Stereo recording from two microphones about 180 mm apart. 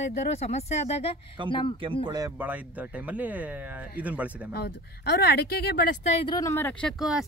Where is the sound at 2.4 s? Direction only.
10° right (ahead or behind).